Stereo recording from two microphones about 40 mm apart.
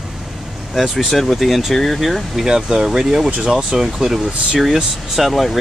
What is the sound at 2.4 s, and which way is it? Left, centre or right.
Speech, centre.